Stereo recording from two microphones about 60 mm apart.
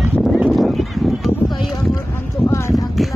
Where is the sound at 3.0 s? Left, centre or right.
Centre.